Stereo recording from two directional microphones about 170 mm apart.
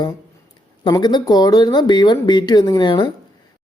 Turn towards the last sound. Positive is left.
turn(degrees=25)  # may be behind; listen again after turning